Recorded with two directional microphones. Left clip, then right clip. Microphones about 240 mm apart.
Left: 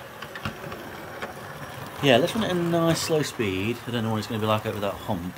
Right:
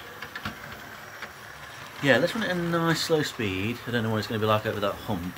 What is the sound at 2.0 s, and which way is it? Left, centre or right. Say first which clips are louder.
Speech: left 2 dB; centre.